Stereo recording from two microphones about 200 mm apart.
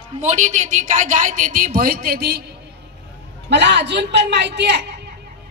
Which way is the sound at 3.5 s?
60° right (ahead or behind).